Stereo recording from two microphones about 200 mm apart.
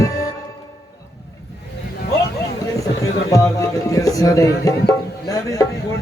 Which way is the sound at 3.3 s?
15° left (ahead or behind).